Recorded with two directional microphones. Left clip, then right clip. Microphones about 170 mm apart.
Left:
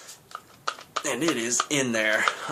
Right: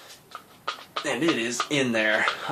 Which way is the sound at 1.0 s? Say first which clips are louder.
Right 2 dB; 15° left (ahead or behind).